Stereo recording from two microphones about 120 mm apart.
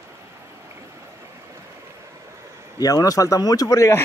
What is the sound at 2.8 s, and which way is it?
Speech, 30° left (ahead or behind).